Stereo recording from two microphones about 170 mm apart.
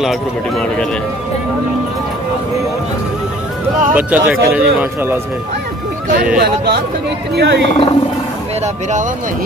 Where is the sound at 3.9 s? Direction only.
10° right (ahead or behind).